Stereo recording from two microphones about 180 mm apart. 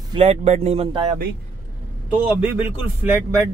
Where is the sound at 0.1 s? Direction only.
35° right (ahead or behind).